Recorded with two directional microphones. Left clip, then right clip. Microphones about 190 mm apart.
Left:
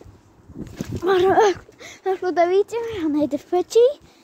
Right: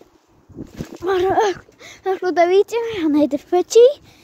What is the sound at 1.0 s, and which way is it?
Speech, 15° left (ahead or behind).